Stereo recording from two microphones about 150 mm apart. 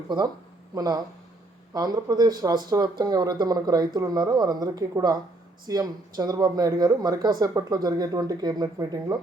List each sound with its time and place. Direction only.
0.7 s speech: 25° right (ahead or behind)